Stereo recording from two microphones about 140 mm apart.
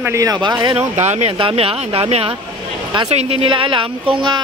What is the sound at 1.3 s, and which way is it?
Speech, 40° right (ahead or behind).